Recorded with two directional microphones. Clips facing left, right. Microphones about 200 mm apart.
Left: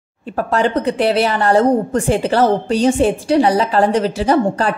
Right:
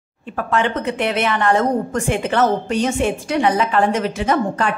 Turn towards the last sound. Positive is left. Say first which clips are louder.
# left 4 dB
turn(degrees=35)  # may be behind; listen again after turning